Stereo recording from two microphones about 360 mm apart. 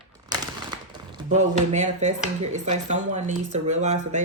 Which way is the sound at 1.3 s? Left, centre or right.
Centre.